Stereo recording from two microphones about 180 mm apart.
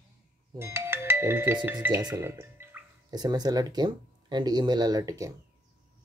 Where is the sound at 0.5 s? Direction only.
15° right (ahead or behind).